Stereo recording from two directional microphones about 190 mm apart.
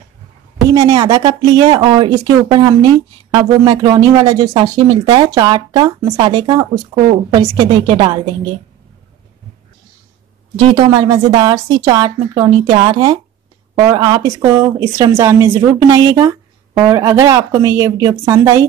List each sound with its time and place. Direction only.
0.7 s speech: 20° right (ahead or behind)
10.7 s a woman's voice: 25° right (ahead or behind)